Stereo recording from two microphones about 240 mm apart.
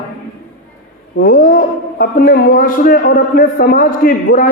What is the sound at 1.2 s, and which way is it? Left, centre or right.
A man's voice, left.